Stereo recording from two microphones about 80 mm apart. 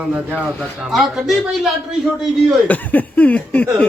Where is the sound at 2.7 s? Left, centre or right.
Left.